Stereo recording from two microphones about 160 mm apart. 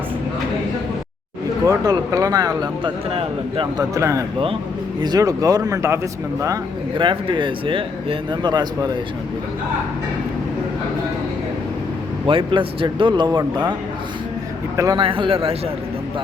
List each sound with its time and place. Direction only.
1.6 s speech: 20° right (ahead or behind)
3.8 s speech: 20° right (ahead or behind)
12.2 s speech: 30° right (ahead or behind)
14.8 s speech: 20° right (ahead or behind)
15.0 s speech: 35° right (ahead or behind)